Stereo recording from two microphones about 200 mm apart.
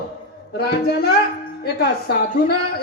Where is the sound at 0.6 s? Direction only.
50° left (ahead or behind).